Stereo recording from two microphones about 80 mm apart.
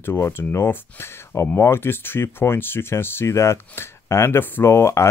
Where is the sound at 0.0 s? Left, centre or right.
Left.